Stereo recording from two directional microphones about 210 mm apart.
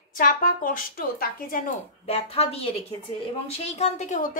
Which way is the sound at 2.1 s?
30° left (ahead or behind).